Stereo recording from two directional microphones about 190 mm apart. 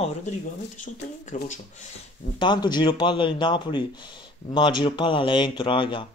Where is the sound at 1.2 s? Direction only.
40° left (ahead or behind).